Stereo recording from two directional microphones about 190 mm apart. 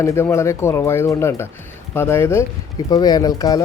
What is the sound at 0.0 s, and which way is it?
Speech, 15° left (ahead or behind).